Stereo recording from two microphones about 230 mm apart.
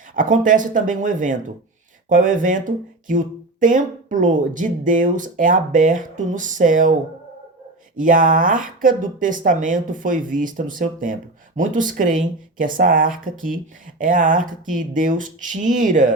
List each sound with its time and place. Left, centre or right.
0.1 s speech: right
7.9 s speech: right